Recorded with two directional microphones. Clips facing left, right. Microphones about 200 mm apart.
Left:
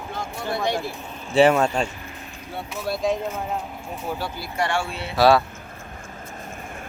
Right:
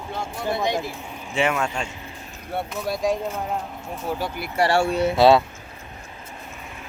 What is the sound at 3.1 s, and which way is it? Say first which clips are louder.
Speech: even; centre (ahead or behind).